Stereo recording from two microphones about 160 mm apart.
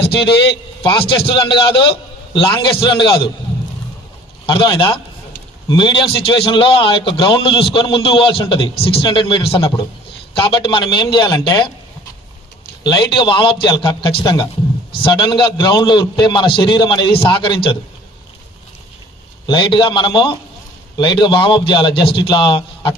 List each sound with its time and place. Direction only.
0.8 s a man's voice: 35° left (ahead or behind)
4.5 s a man's voice: 30° left (ahead or behind)
12.8 s a man's voice: 30° left (ahead or behind)
19.4 s a man's voice: 30° left (ahead or behind)